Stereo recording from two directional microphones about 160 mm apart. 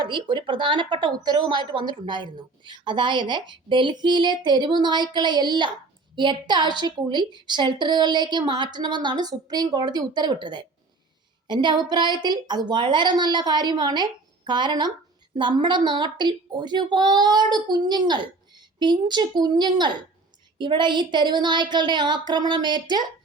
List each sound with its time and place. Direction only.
0.0 s speech: 30° right (ahead or behind)